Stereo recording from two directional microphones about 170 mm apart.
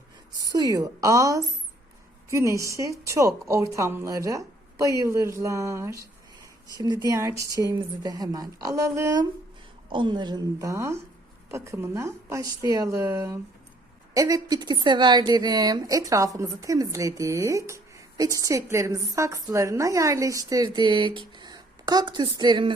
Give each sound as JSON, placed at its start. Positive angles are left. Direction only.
{"t": 0.5, "sound": "a woman's voice", "side_deg": -20}